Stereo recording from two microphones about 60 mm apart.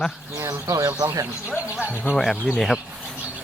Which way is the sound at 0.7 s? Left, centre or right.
Right.